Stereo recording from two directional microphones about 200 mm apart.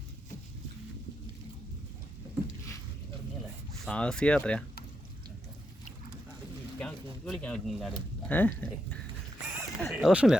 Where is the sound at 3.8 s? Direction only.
5° left (ahead or behind).